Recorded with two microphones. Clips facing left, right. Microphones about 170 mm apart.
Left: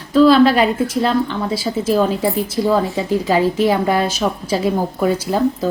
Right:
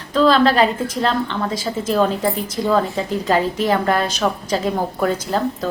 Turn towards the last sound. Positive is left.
turn(degrees=10)  # may be behind; listen again after turning